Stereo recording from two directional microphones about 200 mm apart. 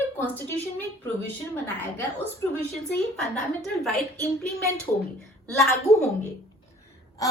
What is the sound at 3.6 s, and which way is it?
Speech, centre (ahead or behind).